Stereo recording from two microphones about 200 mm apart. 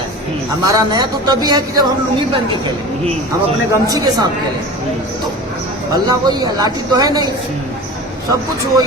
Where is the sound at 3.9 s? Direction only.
20° right (ahead or behind).